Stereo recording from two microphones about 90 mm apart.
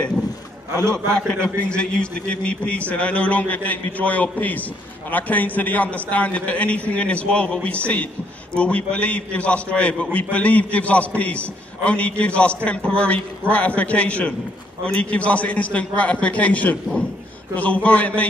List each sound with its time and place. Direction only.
0.9 s a man's voice: 10° left (ahead or behind)